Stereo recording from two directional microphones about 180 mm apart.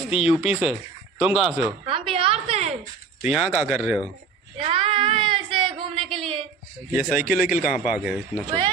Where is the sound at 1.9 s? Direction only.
30° right (ahead or behind).